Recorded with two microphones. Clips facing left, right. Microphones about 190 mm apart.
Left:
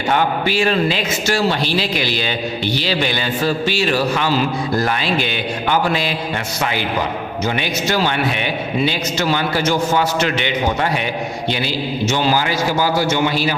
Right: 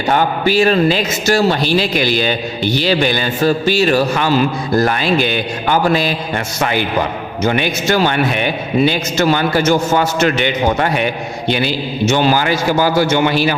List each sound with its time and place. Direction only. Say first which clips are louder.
0.1 s a man's voice: right 3 dB; 40° right (ahead or behind); by 13.6 s 60° right (ahead or behind)